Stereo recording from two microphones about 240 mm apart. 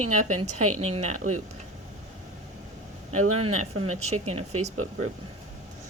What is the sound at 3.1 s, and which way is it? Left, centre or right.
Speech, right.